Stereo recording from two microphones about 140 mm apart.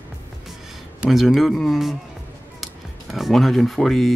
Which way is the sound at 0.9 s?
Centre (ahead or behind).